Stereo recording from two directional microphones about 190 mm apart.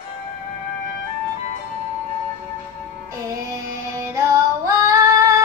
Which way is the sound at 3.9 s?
15° right (ahead or behind).